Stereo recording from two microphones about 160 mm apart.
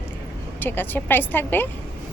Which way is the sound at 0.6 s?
10° left (ahead or behind).